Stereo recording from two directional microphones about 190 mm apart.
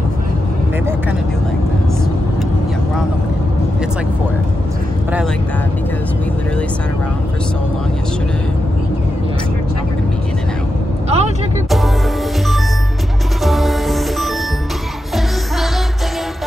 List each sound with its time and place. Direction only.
11.1 s vehicle: 35° right (ahead or behind)
13.4 s music: centre (ahead or behind)